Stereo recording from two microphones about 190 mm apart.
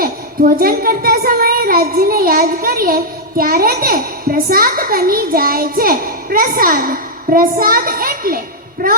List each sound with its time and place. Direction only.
0.0 s a woman's voice: 50° right (ahead or behind)